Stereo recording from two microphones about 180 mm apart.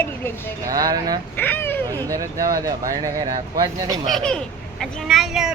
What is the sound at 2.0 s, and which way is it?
Speech, 20° right (ahead or behind).